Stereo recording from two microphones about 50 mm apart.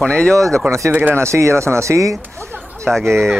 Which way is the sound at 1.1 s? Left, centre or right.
Right.